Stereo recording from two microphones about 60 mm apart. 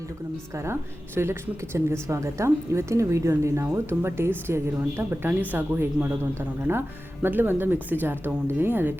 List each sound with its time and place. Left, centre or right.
0.5 s speech: right
5.3 s speech: right